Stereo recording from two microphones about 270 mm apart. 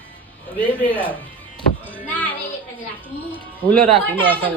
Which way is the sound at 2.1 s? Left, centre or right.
Centre.